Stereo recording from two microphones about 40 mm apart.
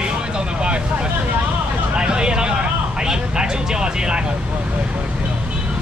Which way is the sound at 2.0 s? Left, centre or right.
Right.